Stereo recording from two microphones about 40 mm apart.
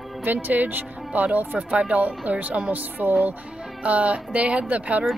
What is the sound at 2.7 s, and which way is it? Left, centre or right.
Speech, right.